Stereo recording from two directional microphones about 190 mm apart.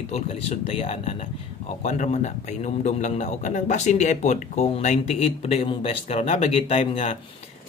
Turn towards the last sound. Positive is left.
turn(degrees=30)  # may be behind; listen again after turning